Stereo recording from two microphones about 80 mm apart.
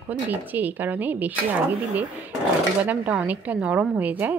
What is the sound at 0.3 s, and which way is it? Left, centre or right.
A woman's voice, right.